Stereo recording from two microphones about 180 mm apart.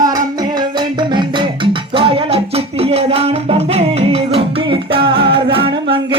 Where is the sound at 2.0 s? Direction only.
30° right (ahead or behind).